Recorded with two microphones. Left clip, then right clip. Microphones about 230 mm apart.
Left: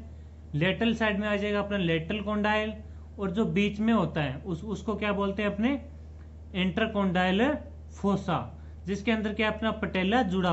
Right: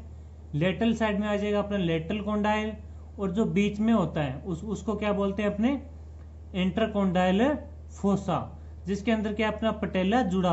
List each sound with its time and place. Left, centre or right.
0.5 s a man's voice: centre